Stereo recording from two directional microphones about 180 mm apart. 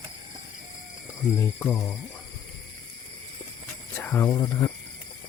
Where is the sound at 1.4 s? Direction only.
15° left (ahead or behind).